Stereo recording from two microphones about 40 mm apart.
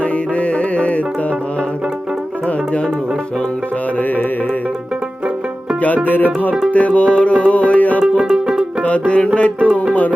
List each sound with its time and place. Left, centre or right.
0.0 s music: left
5.8 s music: left
6.7 s music: left
8.0 s music: centre
8.8 s music: left